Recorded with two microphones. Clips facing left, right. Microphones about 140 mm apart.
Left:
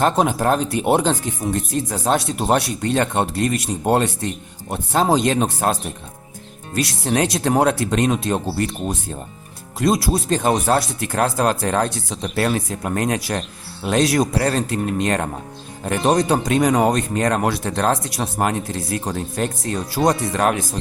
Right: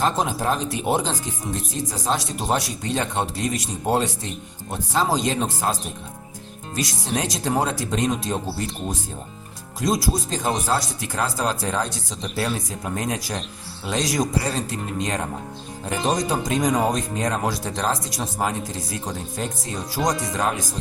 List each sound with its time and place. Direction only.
0.0 s speech: 60° left (ahead or behind)
6.7 s speech: 65° left (ahead or behind)